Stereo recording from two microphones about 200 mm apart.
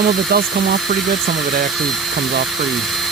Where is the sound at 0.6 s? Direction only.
55° right (ahead or behind).